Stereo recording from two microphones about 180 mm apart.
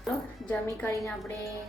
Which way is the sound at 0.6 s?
15° left (ahead or behind).